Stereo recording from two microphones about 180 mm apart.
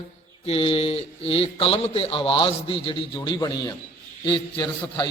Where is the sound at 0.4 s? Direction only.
30° left (ahead or behind).